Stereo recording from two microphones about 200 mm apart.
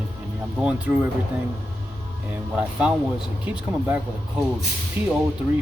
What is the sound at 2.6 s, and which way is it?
Speech, 5° right (ahead or behind).